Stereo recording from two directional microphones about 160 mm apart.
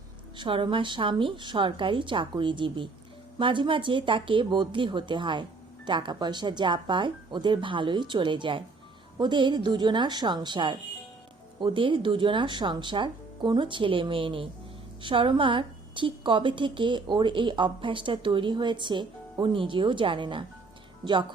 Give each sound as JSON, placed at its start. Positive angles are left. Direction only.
{"t": 0.3, "sound": "a woman's voice", "side_deg": -30}